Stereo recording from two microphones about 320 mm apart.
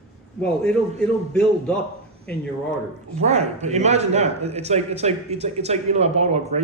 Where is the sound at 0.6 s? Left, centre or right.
Centre.